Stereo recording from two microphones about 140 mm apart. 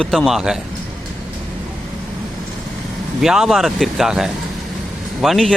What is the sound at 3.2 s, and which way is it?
Speech, centre (ahead or behind).